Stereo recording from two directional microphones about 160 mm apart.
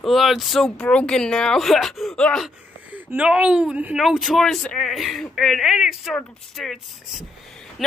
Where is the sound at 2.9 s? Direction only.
10° right (ahead or behind).